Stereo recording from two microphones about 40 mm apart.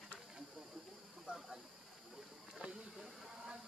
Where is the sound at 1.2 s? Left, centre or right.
Centre.